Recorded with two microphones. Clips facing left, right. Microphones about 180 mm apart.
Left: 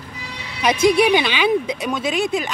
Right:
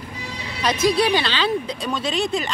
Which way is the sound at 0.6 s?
15° left (ahead or behind).